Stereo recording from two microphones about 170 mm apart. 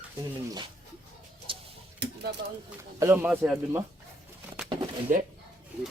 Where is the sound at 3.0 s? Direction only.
15° right (ahead or behind).